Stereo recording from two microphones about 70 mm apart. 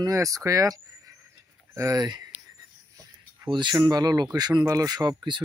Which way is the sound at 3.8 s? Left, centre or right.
Right.